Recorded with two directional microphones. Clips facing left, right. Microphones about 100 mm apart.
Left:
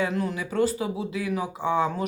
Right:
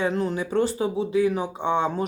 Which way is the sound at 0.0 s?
30° right (ahead or behind).